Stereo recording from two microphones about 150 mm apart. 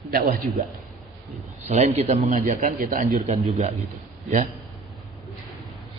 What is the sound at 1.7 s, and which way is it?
A man's voice, 55° right (ahead or behind).